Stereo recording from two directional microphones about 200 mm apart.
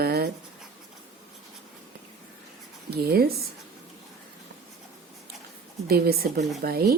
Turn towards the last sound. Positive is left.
turn(degrees=-50)  # may be behind; listen again after turning